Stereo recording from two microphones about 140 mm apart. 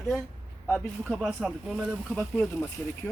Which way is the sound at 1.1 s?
5° right (ahead or behind).